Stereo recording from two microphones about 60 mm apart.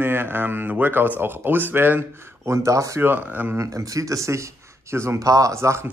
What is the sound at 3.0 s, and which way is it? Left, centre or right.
Speech, right.